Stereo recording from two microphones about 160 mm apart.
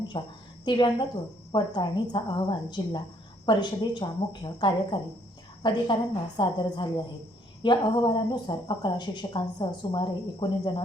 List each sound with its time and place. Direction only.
0.1 s a woman's voice: 30° left (ahead or behind)